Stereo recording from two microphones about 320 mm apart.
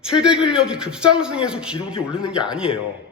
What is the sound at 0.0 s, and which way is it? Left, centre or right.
A man's voice, centre.